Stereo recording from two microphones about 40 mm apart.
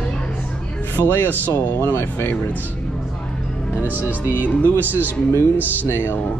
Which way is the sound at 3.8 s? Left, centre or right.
Right.